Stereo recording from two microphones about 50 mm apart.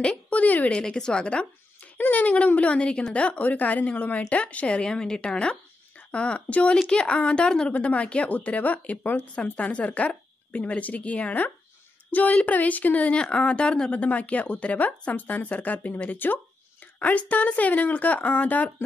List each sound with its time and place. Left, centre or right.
0.0 s a woman's voice: left
0.7 s speech: centre
2.0 s a woman's voice: left
13.2 s a woman's voice: left
13.9 s speech: left
16.8 s a sound: left
17.2 s a woman's voice: left